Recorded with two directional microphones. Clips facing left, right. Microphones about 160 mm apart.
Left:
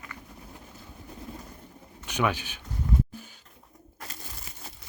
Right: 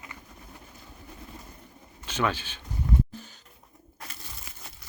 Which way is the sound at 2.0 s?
15° left (ahead or behind).